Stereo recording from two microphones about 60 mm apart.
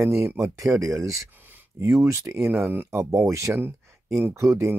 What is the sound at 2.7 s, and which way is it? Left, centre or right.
Speech, right.